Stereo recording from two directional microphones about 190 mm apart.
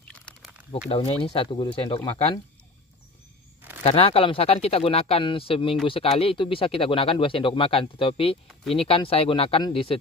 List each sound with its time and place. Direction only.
0.1 s a sound: 5° left (ahead or behind)
0.7 s speech: 30° left (ahead or behind)
3.8 s speech: 30° left (ahead or behind)